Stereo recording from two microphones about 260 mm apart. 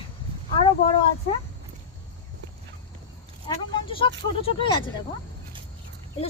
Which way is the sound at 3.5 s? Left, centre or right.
Centre.